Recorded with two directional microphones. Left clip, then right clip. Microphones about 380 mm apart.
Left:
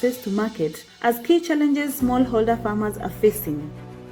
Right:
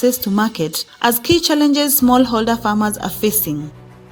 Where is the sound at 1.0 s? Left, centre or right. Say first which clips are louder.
Right 5 dB; right.